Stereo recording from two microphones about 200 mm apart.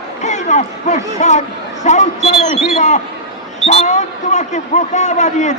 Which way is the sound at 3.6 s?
30° left (ahead or behind).